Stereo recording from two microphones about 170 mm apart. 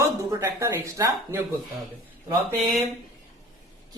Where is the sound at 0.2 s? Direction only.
20° right (ahead or behind).